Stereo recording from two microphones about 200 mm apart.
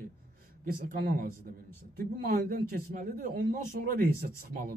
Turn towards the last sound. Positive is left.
turn(degrees=-45)  # may be behind; listen again after turning